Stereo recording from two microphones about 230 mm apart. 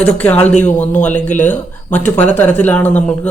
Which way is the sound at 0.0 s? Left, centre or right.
Centre.